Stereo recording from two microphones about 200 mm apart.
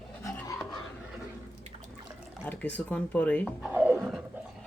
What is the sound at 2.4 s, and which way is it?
Speech, 5° left (ahead or behind).